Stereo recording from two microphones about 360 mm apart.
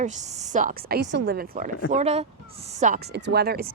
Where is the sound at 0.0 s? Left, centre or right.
Centre.